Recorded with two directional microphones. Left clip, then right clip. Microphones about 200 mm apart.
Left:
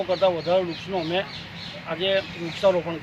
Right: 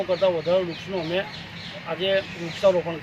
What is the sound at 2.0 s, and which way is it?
Speech, centre (ahead or behind).